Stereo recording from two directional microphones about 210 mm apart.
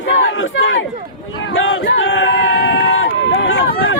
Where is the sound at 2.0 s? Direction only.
65° left (ahead or behind).